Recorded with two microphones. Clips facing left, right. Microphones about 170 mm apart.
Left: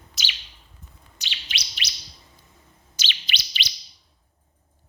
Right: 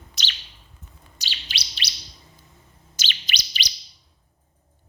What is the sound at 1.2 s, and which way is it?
Chirp, 35° right (ahead or behind).